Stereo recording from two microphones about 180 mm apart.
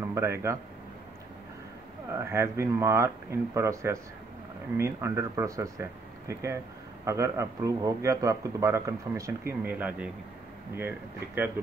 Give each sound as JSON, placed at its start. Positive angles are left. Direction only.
{"t": 0.1, "sound": "a man's voice", "side_deg": -15}
{"t": 2.0, "sound": "a man's voice", "side_deg": -15}